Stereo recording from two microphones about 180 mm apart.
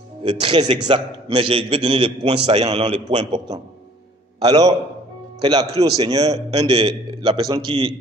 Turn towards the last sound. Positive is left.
turn(degrees=-30)  # may be behind; listen again after turning